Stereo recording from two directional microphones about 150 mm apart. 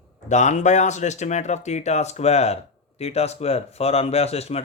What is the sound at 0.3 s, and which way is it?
Speech, 50° left (ahead or behind).